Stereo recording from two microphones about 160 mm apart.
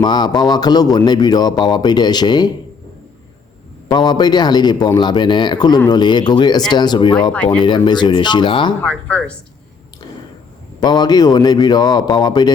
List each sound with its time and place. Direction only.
0.0 s a man's voice: 25° left (ahead or behind)
3.9 s a man's voice: 25° left (ahead or behind)
7.3 s speech: 10° left (ahead or behind)
7.9 s a man's voice: 25° left (ahead or behind)
8.8 s speech: 5° left (ahead or behind)
10.8 s a man's voice: 25° left (ahead or behind)